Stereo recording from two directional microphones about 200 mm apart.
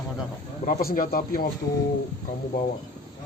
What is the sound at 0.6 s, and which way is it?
Speech, 45° left (ahead or behind).